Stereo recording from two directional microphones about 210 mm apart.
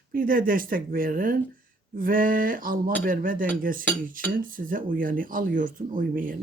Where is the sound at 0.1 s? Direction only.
40° right (ahead or behind).